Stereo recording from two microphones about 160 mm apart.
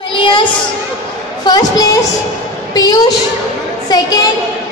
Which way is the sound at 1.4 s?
25° left (ahead or behind).